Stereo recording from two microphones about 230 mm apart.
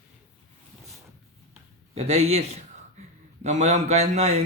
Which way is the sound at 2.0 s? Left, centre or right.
Right.